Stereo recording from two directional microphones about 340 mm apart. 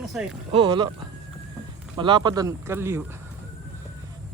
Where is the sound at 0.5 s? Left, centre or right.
Centre.